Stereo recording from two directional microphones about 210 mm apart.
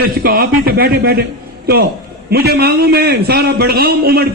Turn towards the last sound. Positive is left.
turn(degrees=-45)  # may be behind; listen again after turning